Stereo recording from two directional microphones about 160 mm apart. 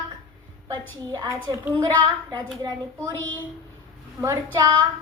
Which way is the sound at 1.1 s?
20° right (ahead or behind).